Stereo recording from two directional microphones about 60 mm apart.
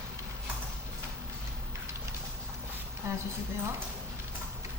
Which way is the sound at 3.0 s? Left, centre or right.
Right.